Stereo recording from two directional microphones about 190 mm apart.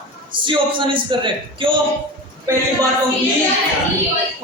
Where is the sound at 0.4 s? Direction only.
25° right (ahead or behind).